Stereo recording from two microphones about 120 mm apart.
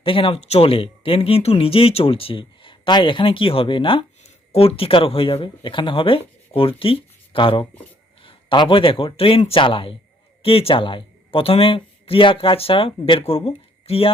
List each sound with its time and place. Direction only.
0.0 s speech: 45° left (ahead or behind)